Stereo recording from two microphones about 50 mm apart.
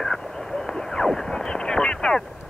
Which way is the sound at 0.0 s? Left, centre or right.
Centre.